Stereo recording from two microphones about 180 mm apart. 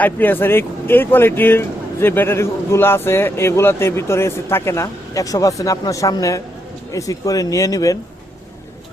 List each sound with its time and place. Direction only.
0.0 s speech: 10° left (ahead or behind)